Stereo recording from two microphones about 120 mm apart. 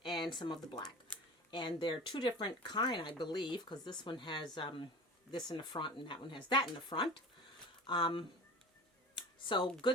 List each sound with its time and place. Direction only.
0.0 s speech: 40° left (ahead or behind)
9.5 s speech: 40° left (ahead or behind)